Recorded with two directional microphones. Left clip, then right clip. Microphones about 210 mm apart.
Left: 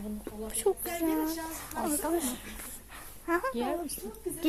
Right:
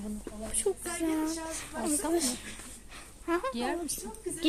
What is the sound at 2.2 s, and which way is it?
Speech, 30° right (ahead or behind).